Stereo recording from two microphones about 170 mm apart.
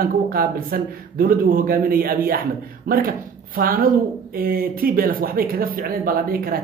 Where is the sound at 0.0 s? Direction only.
60° right (ahead or behind).